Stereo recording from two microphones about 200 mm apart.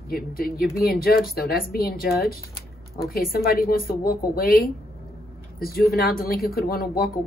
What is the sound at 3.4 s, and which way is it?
A woman's voice, 50° left (ahead or behind).